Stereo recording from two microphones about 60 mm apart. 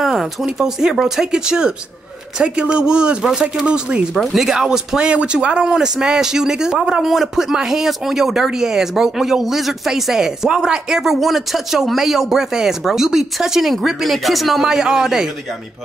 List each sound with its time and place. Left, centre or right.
0.0 s speech: centre
4.2 s speech: centre